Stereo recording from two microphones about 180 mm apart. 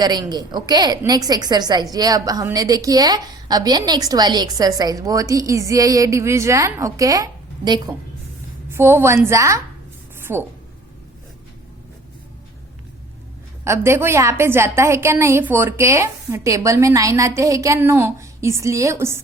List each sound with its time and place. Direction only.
0.0 s a woman's voice: 20° right (ahead or behind)
13.7 s a woman's voice: 15° right (ahead or behind)